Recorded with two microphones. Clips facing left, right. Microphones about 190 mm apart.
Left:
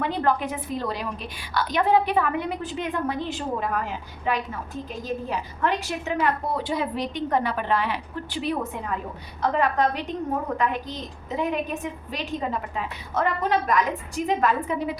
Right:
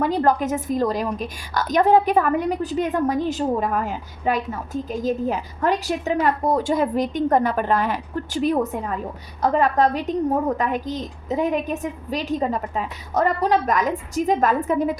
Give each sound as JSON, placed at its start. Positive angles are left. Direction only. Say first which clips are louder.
{"t": 0.0, "sound": "a woman's voice", "louder": "right 5 dB", "side_deg": -40}